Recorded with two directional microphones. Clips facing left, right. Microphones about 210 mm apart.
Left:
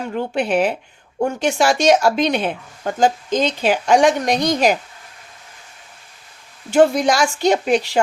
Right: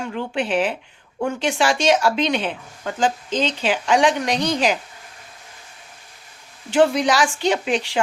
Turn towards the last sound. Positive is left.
turn(degrees=40)  # may be behind; listen again after turning